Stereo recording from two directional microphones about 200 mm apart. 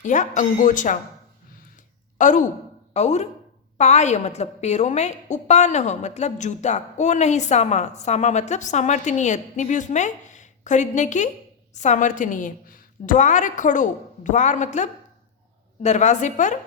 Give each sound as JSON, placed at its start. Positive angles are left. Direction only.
{"t": 0.0, "sound": "a woman's voice", "side_deg": 40}
{"t": 2.1, "sound": "a woman's voice", "side_deg": 40}